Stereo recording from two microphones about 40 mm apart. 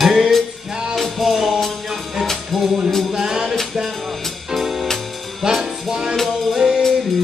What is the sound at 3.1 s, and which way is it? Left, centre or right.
Music, centre.